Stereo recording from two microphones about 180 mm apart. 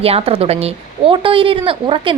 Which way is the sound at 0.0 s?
35° right (ahead or behind).